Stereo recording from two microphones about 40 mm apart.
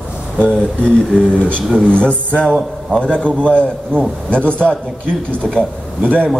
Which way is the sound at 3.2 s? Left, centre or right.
Left.